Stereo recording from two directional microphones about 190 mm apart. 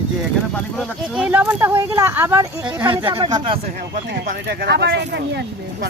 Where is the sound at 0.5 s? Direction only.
5° left (ahead or behind).